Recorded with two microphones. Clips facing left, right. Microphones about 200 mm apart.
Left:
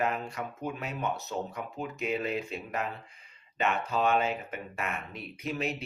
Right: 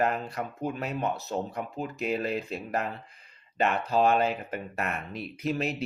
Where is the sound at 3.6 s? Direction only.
35° right (ahead or behind).